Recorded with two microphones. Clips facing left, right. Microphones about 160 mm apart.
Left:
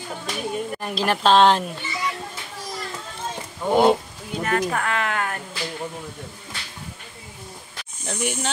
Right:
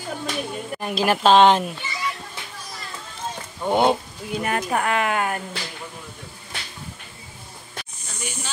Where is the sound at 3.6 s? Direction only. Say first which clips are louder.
Left 2 dB; centre (ahead or behind).